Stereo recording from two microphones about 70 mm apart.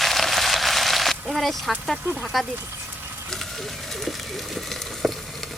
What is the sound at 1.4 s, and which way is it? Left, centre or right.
Speech, centre.